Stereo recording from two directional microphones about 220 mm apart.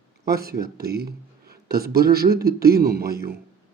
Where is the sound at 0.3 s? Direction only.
45° right (ahead or behind).